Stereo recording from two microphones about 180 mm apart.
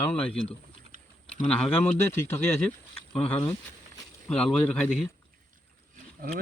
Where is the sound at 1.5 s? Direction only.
10° left (ahead or behind).